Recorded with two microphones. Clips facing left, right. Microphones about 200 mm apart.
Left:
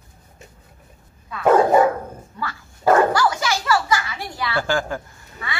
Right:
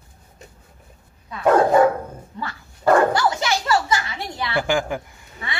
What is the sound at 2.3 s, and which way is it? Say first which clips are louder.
Dog: left 1 dB; 20° right (ahead or behind).